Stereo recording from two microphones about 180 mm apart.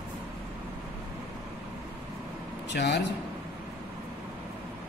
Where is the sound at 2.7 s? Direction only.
70° left (ahead or behind).